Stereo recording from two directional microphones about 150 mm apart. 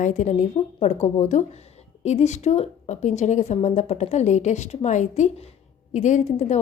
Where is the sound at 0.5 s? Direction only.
45° left (ahead or behind).